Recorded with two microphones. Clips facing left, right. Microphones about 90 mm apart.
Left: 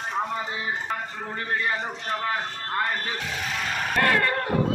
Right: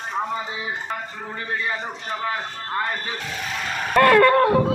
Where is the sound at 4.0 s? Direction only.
60° right (ahead or behind).